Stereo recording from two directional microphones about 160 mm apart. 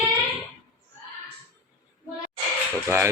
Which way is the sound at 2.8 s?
15° right (ahead or behind).